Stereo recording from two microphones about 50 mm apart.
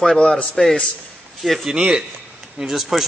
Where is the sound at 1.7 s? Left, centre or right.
Centre.